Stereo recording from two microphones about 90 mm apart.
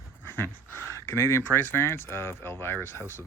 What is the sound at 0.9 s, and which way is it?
Speech, 30° left (ahead or behind).